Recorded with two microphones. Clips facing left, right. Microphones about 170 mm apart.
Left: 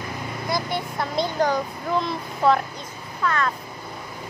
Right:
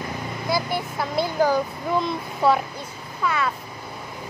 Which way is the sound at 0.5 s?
5° right (ahead or behind).